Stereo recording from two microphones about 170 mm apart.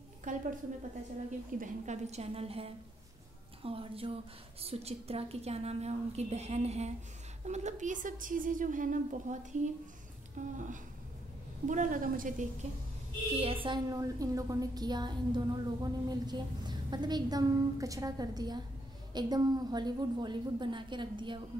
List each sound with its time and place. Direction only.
0.3 s a woman's voice: 50° right (ahead or behind)
1.6 s a woman's voice: 40° right (ahead or behind)
11.6 s a woman's voice: 50° right (ahead or behind)
13.4 s a woman's voice: 35° right (ahead or behind)